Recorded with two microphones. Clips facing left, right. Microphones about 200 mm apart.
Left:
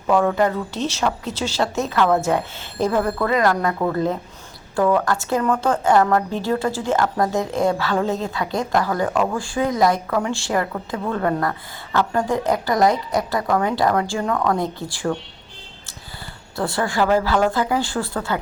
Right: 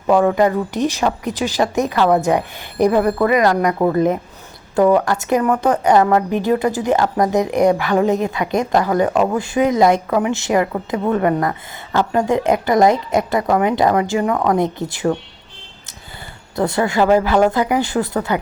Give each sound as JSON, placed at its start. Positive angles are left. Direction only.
{"t": 0.2, "sound": "a woman's voice", "side_deg": -10}
{"t": 16.6, "sound": "a woman's voice", "side_deg": -20}